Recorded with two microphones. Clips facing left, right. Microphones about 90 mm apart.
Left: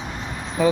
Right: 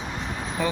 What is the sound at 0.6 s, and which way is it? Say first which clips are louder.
Speech: left 8 dB; 10° left (ahead or behind).